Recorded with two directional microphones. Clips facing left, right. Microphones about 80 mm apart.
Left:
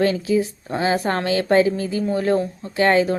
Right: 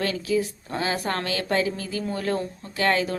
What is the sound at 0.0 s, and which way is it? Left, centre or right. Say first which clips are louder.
A woman's voice: left 6 dB; left.